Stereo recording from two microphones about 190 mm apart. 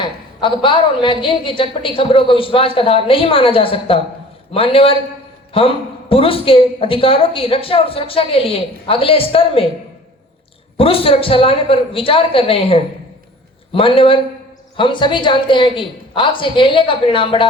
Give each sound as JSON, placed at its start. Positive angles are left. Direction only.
{"t": 0.0, "sound": "a woman's voice", "side_deg": 25}
{"t": 10.8, "sound": "a woman's voice", "side_deg": 30}